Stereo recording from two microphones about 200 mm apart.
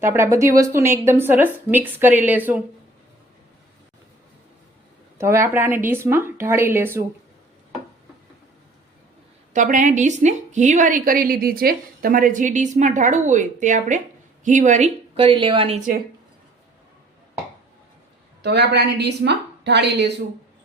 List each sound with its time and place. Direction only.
0.0 s speech: 15° right (ahead or behind)
5.1 s speech: 15° right (ahead or behind)
9.5 s a woman's voice: 40° right (ahead or behind)
18.4 s a woman's voice: 55° right (ahead or behind)